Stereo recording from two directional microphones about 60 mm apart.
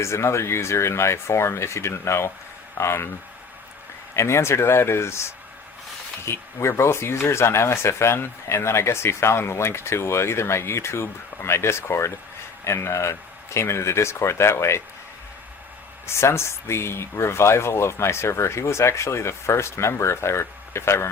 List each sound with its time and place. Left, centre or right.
0.0 s speech: left
4.1 s speech: left
16.0 s speech: left